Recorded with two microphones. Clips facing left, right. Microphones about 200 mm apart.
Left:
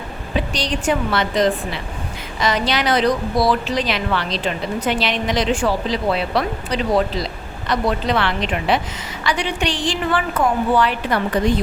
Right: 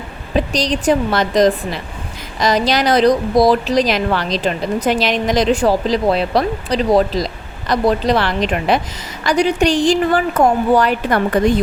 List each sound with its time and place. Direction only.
0.3 s a woman's voice: 40° right (ahead or behind)